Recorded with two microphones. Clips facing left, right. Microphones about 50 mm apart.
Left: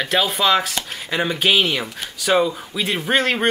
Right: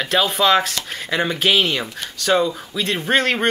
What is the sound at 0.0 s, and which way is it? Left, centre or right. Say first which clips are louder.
Speech: right 1 dB; centre.